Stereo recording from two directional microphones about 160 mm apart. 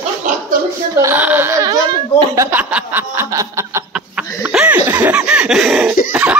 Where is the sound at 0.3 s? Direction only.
50° right (ahead or behind).